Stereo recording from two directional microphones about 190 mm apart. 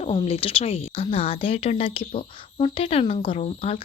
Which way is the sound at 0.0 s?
30° left (ahead or behind).